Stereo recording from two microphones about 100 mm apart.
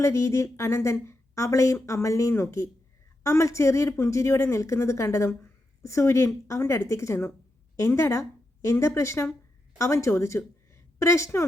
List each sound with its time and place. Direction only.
0.0 s a woman's voice: 30° left (ahead or behind)